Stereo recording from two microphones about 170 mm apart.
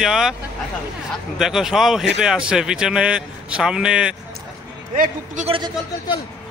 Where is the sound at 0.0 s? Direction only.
Centre (ahead or behind).